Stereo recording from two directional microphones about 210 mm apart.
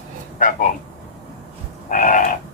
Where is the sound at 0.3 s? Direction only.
40° left (ahead or behind).